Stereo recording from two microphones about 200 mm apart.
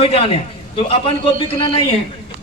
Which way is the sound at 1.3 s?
30° left (ahead or behind).